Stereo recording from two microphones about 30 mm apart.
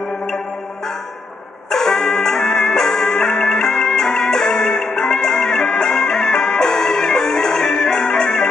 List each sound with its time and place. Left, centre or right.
1.7 s music: centre